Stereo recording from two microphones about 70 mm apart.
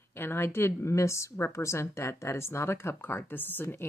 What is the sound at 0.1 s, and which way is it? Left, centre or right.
A woman's voice, left.